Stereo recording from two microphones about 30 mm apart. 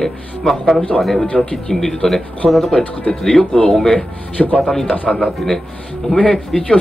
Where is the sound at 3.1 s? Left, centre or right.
Left.